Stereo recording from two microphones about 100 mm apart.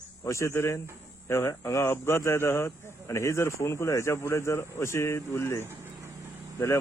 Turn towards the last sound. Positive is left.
turn(degrees=30)  # may be behind; listen again after turning